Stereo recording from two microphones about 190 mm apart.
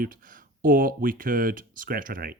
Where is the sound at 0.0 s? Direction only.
45° right (ahead or behind).